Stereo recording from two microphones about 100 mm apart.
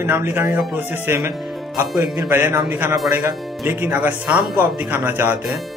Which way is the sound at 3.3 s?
Centre (ahead or behind).